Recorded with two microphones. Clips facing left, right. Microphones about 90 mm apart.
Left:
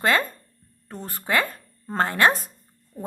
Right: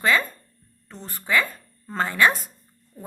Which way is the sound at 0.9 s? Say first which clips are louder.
Left 4 dB; 45° left (ahead or behind).